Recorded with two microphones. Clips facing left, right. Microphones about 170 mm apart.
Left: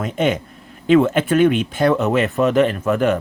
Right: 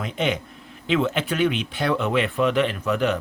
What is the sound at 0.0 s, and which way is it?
Speech, 45° left (ahead or behind).